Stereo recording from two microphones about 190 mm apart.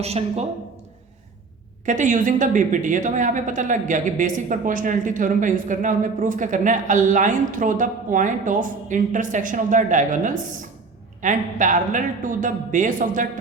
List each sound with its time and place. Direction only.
0.0 s a woman's voice: 35° right (ahead or behind)
1.8 s a woman's voice: 40° right (ahead or behind)